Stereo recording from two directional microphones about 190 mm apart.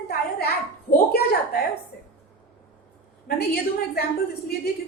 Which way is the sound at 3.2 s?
55° left (ahead or behind).